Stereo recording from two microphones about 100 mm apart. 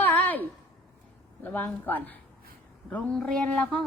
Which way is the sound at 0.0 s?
20° left (ahead or behind).